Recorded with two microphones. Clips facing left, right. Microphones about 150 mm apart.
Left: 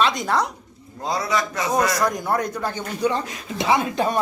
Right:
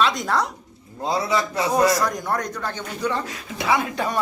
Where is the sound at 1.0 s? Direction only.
25° right (ahead or behind).